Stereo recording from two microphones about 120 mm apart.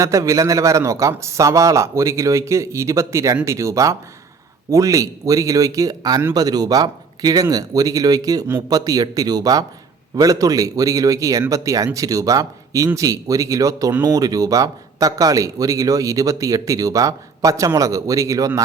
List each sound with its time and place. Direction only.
0.0 s a man's voice: 25° right (ahead or behind)